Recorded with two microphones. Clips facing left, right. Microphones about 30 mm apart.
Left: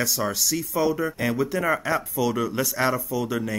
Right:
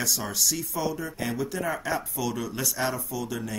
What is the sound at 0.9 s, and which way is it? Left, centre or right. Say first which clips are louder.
Speech: left 6 dB; left.